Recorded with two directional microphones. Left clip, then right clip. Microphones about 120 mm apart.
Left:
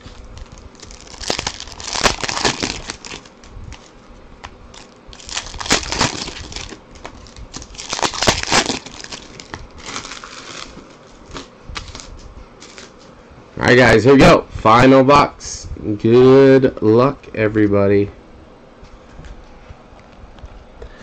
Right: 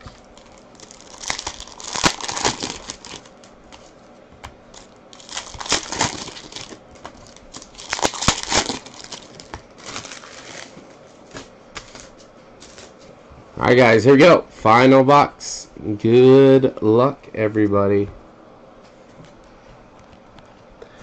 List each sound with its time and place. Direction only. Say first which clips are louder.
1.6 s crumpling: left 1 dB; 10° left (ahead or behind)
5.1 s crumpling: left 5 dB; 10° left (ahead or behind)
7.7 s a sound: left 2 dB; 10° left (ahead or behind)
8.6 s crumpling: left 5 dB; 5° left (ahead or behind)
9.9 s a sound: left 5 dB; 30° left (ahead or behind)
11.3 s typewriter: left 5 dB; 30° left (ahead or behind)
13.6 s speech: left 2 dB; 10° left (ahead or behind)
17.6 s speech: left 3 dB; 30° left (ahead or behind)